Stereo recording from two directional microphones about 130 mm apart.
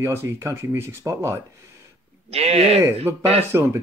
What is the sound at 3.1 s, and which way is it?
Speech, 15° right (ahead or behind).